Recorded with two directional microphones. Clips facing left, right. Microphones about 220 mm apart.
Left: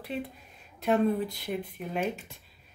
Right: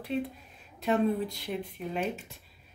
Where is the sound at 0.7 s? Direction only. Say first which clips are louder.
Left 1 dB; centre (ahead or behind).